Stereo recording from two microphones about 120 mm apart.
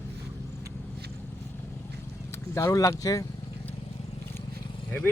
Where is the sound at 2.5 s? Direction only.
25° left (ahead or behind).